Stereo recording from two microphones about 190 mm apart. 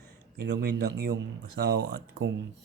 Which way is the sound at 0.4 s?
60° right (ahead or behind).